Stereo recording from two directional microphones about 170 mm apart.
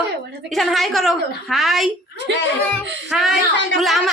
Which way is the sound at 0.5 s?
Centre (ahead or behind).